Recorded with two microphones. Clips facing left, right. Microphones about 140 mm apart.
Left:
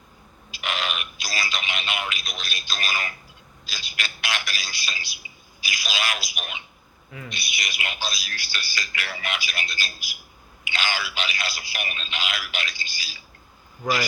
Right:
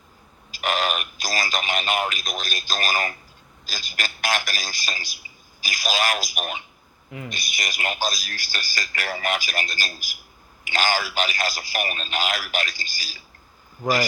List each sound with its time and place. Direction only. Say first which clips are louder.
0.5 s a man's voice: right 5 dB; 45° right (ahead or behind)